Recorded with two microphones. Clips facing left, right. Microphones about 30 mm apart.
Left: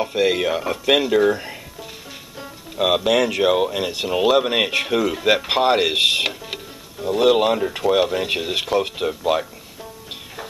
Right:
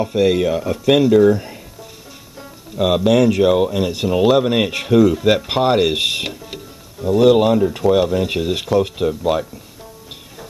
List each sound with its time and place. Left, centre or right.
0.0 s speech: centre
2.3 s speech: centre
7.0 s speech: centre